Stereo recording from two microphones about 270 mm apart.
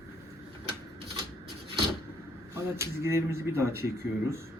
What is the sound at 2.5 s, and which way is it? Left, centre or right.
Speech, centre.